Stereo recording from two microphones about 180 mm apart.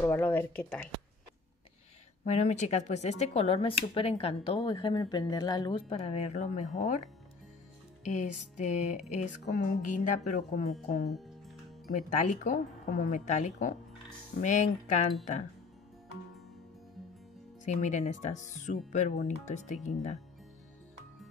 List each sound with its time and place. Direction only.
0.0 s speech: 10° left (ahead or behind)
2.2 s speech: 40° left (ahead or behind)
8.1 s speech: 40° left (ahead or behind)
11.1 s music: centre (ahead or behind)
11.9 s speech: 45° left (ahead or behind)
17.6 s speech: 40° left (ahead or behind)